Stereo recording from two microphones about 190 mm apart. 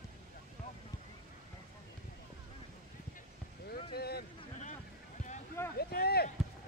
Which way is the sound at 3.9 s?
55° left (ahead or behind).